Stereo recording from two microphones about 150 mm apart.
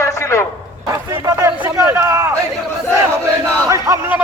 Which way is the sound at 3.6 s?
20° right (ahead or behind).